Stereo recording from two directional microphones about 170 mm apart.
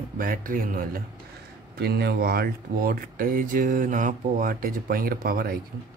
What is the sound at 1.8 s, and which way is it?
Speech, 70° right (ahead or behind).